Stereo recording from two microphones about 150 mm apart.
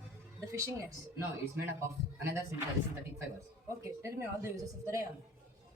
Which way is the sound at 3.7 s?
20° right (ahead or behind).